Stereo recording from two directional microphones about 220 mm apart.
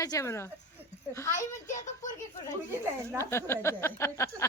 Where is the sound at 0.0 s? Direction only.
15° left (ahead or behind).